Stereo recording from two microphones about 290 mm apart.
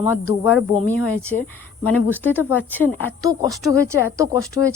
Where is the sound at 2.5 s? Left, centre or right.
Centre.